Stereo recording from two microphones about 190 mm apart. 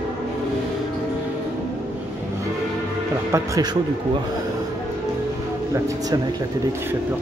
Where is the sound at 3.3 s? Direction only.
20° right (ahead or behind).